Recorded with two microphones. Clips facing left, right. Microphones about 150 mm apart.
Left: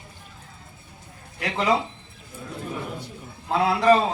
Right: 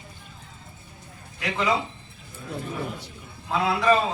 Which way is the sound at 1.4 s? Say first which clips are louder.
Left 2 dB; 30° left (ahead or behind).